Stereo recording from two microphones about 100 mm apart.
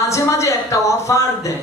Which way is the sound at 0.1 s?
30° left (ahead or behind).